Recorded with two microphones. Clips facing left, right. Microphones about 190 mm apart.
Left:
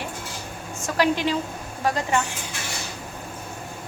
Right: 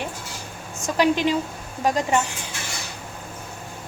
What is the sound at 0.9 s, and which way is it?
Speech, 20° right (ahead or behind).